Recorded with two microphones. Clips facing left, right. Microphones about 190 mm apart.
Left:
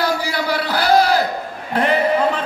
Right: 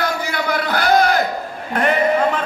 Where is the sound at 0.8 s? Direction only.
35° left (ahead or behind).